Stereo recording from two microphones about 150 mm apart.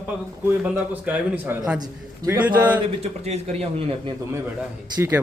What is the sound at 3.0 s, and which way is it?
Speech, 45° right (ahead or behind).